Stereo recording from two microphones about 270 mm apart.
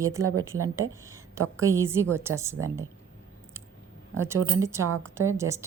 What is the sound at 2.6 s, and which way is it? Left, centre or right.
Speech, right.